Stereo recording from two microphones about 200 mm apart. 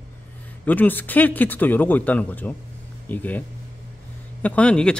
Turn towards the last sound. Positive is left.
turn(degrees=5)  # may be behind; listen again after turning